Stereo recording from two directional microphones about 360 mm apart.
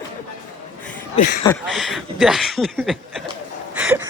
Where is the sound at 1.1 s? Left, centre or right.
Left.